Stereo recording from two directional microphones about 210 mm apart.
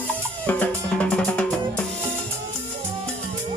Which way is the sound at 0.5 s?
10° left (ahead or behind).